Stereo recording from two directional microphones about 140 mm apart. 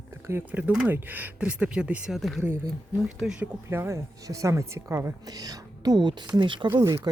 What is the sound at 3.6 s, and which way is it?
Speech, 20° right (ahead or behind).